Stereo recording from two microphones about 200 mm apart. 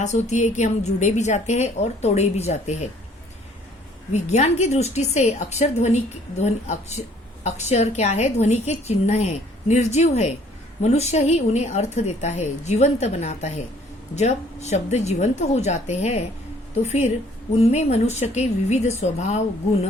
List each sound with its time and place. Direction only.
0.0 s a woman's voice: 35° left (ahead or behind)
4.1 s a woman's voice: 35° left (ahead or behind)